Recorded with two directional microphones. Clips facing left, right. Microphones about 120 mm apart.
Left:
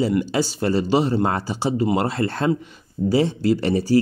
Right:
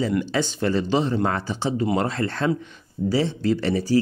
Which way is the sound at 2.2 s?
45° left (ahead or behind).